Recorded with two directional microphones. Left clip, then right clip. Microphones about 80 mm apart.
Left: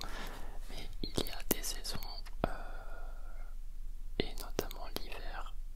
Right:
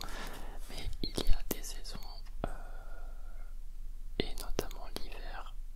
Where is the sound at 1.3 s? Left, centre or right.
Centre.